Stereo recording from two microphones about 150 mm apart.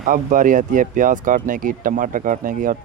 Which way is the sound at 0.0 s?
65° right (ahead or behind).